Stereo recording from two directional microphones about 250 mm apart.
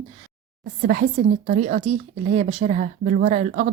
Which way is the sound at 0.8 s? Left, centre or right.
Right.